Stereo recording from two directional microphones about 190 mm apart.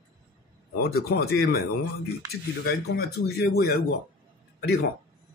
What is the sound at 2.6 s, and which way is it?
Speech, 55° left (ahead or behind).